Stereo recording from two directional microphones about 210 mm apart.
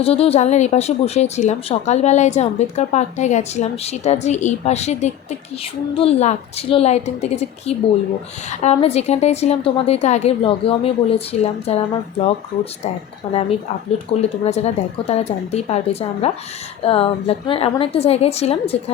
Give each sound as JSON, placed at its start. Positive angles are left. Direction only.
{"t": 0.0, "sound": "a woman's voice", "side_deg": 30}
{"t": 13.2, "sound": "a woman's voice", "side_deg": 25}